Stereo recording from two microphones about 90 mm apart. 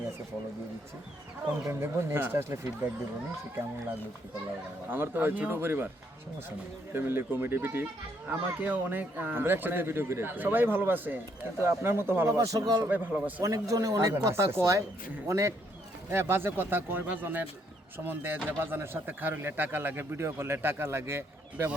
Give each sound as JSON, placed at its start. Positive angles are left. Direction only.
{"t": 1.6, "sound": "a man's voice", "side_deg": -25}
{"t": 4.9, "sound": "a man's voice", "side_deg": -20}
{"t": 6.9, "sound": "a man's voice", "side_deg": -25}
{"t": 12.9, "sound": "a man's voice", "side_deg": -20}
{"t": 13.4, "sound": "a man's voice", "side_deg": -40}